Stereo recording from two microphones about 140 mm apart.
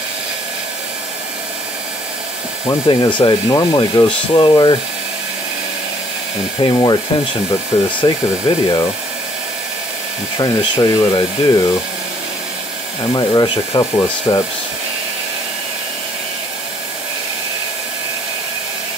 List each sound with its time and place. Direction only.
2.9 s speech: 35° left (ahead or behind)
6.6 s speech: 30° left (ahead or behind)
8.0 s speech: 25° left (ahead or behind)
10.4 s speech: 25° left (ahead or behind)
13.1 s speech: 25° left (ahead or behind)